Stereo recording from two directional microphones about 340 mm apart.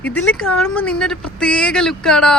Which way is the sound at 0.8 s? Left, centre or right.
Centre.